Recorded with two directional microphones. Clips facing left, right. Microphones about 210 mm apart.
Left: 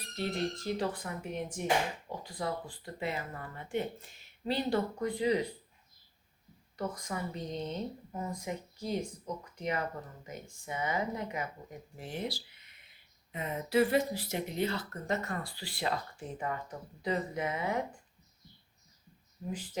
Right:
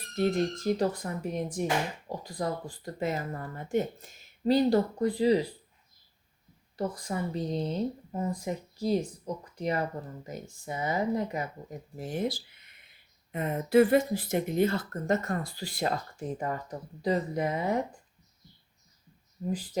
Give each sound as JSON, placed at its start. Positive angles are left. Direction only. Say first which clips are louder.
{"t": 0.2, "sound": "speech", "louder": "right 7 dB", "side_deg": -45}
{"t": 6.7, "sound": "speech", "louder": "right 5 dB", "side_deg": -30}
{"t": 19.5, "sound": "speech", "louder": "right 6 dB", "side_deg": -35}